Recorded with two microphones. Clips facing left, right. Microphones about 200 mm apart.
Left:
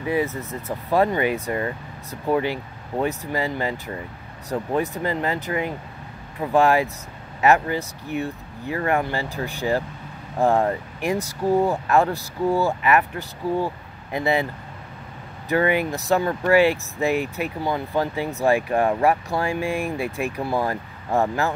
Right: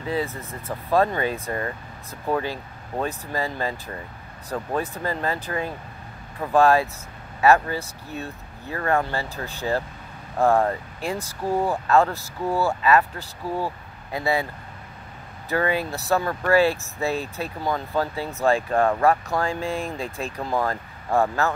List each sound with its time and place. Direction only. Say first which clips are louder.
0.0 s speech: left 3 dB; 15° left (ahead or behind)